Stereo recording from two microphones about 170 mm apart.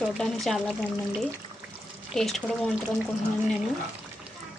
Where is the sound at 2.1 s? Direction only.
Centre (ahead or behind).